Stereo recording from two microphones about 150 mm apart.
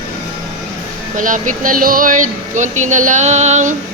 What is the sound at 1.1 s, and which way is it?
Speech, 60° right (ahead or behind).